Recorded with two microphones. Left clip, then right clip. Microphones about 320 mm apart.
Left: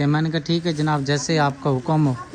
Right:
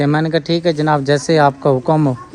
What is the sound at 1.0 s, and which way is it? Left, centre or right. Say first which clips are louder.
Speech: right 9 dB; centre.